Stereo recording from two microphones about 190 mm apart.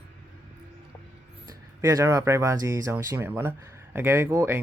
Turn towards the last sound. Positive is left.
turn(degrees=-15)  # may be behind; listen again after turning